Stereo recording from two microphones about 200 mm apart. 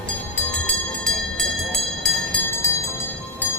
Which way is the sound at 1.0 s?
Centre (ahead or behind).